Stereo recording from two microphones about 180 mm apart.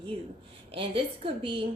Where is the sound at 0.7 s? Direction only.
30° right (ahead or behind).